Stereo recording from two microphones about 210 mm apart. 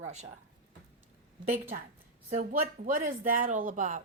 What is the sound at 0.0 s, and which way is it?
Speech, 35° right (ahead or behind).